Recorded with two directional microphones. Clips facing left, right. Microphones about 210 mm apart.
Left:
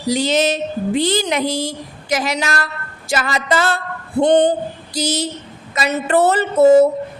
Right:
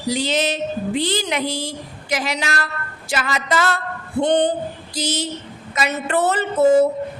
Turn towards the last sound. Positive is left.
turn(degrees=40)  # may be behind; listen again after turning